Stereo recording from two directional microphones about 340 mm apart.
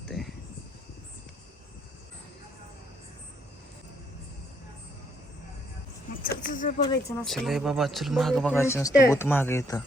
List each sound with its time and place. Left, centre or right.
0.1 s a sound: centre
6.2 s speech: left
7.2 s speech: centre